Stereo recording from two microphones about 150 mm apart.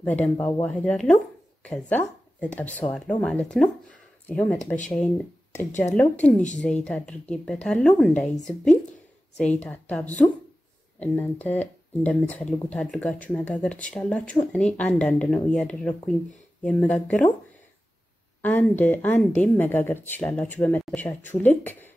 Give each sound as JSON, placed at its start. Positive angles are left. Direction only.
{"t": 0.0, "sound": "speech", "side_deg": 10}
{"t": 5.7, "sound": "speech", "side_deg": 55}
{"t": 5.9, "sound": "speech", "side_deg": 10}
{"t": 9.4, "sound": "speech", "side_deg": 10}
{"t": 18.4, "sound": "speech", "side_deg": 10}